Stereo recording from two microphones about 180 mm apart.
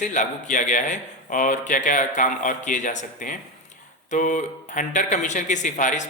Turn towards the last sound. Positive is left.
turn(degrees=45)  # may be behind; listen again after turning